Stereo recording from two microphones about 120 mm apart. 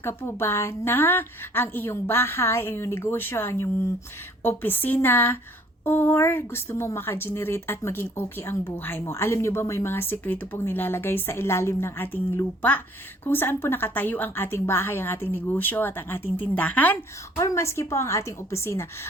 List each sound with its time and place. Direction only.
0.0 s a woman's voice: 20° left (ahead or behind)
17.3 s speech: 25° left (ahead or behind)